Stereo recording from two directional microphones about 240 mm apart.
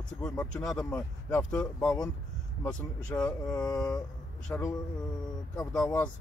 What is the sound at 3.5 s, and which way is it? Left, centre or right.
Speech, centre.